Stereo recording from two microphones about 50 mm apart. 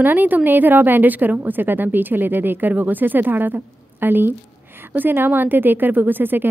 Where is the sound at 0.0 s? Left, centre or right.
Right.